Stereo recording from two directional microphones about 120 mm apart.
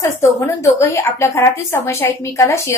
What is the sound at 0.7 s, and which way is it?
A woman's voice, 25° left (ahead or behind).